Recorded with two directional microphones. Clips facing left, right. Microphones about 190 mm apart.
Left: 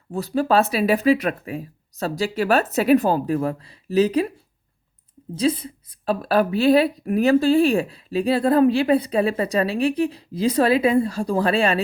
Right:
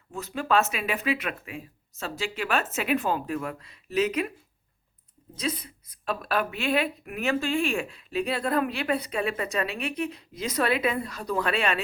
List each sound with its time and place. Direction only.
0.1 s a woman's voice: 35° left (ahead or behind)
5.3 s a woman's voice: 30° left (ahead or behind)